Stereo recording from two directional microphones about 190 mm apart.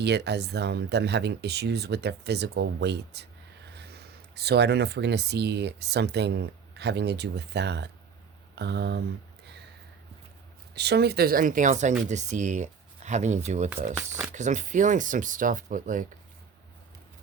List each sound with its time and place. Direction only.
0.0 s speech: 60° right (ahead or behind)
10.8 s speech: 60° right (ahead or behind); by 16.0 s 45° right (ahead or behind)